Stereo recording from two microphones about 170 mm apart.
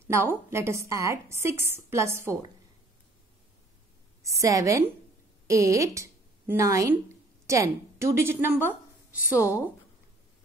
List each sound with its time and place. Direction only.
0.1 s a woman's voice: 15° right (ahead or behind)
4.2 s a woman's voice: 20° right (ahead or behind)